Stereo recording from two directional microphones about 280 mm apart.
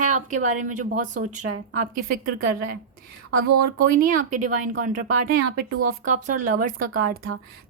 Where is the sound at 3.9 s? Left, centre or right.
Right.